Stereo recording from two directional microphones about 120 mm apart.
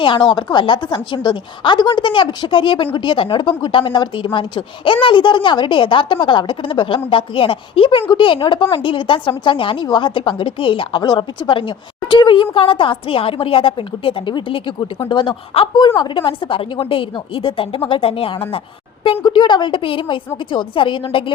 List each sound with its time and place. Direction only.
0.0 s a woman's voice: 40° left (ahead or behind)
19.2 s a woman's voice: 40° left (ahead or behind)